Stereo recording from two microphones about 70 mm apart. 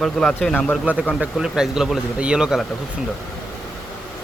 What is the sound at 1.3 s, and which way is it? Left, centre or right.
Speech, centre.